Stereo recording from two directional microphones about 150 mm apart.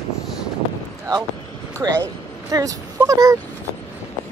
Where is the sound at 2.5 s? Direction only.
20° right (ahead or behind).